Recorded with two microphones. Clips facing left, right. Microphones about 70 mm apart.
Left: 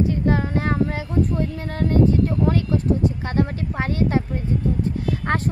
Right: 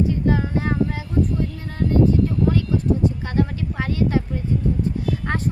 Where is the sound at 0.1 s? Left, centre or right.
Left.